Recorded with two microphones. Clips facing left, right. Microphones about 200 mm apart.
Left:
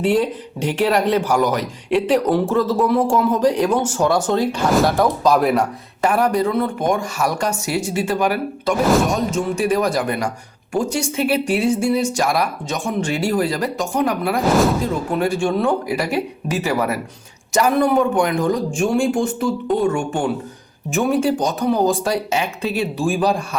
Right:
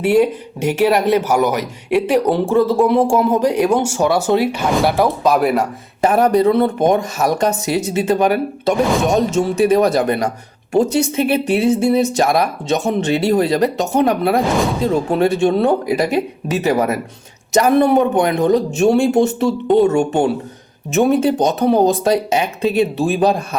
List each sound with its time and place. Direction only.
0.0 s speech: 10° right (ahead or behind)
6.0 s speech: 20° right (ahead or behind)
14.5 s speech: centre (ahead or behind)
14.8 s speech: 25° right (ahead or behind)